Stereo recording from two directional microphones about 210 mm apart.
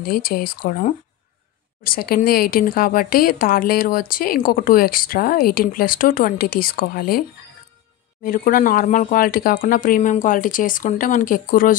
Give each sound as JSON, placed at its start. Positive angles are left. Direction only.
{"t": 0.0, "sound": "speech", "side_deg": 45}